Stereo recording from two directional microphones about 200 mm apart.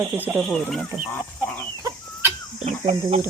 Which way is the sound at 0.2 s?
5° right (ahead or behind).